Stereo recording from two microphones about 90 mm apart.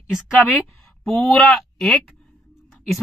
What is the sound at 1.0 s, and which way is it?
Speech, 5° left (ahead or behind).